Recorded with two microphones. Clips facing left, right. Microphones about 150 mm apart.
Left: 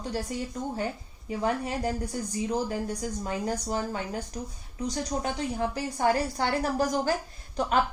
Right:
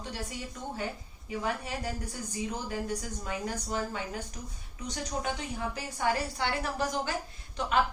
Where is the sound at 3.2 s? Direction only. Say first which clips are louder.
Left 6 dB; 40° left (ahead or behind).